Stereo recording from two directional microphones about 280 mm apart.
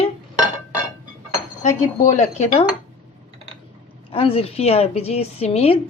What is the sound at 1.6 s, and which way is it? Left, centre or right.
A woman's voice, left.